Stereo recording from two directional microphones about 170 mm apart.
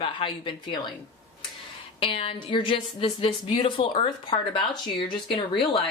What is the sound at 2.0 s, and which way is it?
A woman's voice, 30° left (ahead or behind).